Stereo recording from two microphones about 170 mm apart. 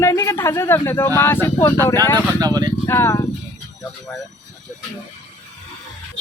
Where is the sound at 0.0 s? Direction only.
15° left (ahead or behind).